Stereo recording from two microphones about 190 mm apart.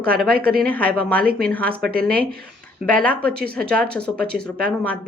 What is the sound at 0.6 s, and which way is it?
A woman's voice, 10° left (ahead or behind).